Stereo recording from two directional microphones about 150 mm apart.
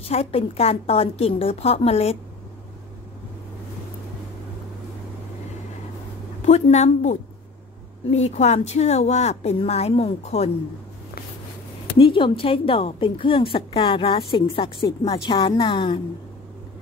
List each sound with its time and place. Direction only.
0.1 s a woman's voice: 40° left (ahead or behind)
6.4 s a woman's voice: 50° left (ahead or behind)
12.0 s a woman's voice: 35° left (ahead or behind)